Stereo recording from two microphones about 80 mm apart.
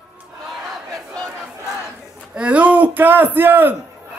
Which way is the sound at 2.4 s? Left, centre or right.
Centre.